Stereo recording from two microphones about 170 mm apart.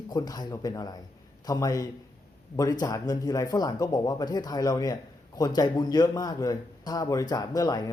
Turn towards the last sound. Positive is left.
turn(degrees=20)  # may be behind; listen again after turning